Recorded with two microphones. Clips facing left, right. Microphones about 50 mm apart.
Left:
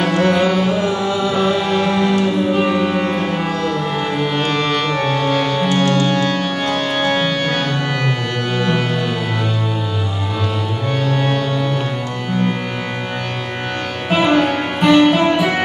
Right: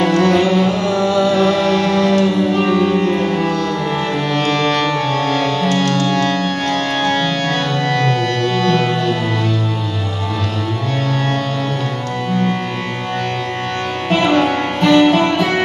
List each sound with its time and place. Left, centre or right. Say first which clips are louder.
0.0 s music: right 2 dB; centre
11.1 s music: left 2 dB; left
14.1 s music: even; centre